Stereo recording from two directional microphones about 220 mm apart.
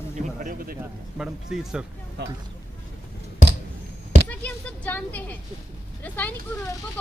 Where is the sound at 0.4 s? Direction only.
40° right (ahead or behind).